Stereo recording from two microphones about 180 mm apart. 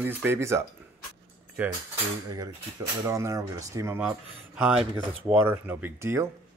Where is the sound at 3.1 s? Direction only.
15° right (ahead or behind).